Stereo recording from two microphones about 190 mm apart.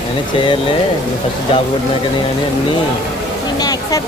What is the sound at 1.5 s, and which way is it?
Speech, 30° left (ahead or behind).